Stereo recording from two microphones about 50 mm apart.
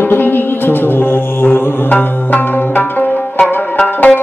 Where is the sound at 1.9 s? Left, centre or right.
Left.